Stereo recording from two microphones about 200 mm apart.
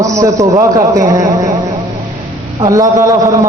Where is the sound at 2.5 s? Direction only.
15° right (ahead or behind).